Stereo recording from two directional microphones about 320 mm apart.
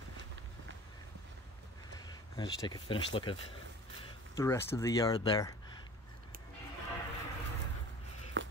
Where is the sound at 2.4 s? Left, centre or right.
Centre.